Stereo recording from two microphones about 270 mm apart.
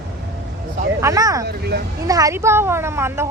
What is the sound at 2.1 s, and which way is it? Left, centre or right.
A woman's voice, centre.